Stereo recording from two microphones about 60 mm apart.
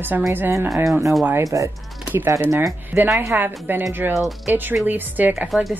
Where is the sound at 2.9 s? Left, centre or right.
Right.